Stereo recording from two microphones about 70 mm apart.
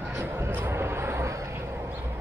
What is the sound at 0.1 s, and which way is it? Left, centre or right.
Vehicle, right.